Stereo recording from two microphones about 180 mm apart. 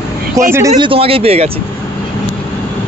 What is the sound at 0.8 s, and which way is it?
Speech, 30° right (ahead or behind).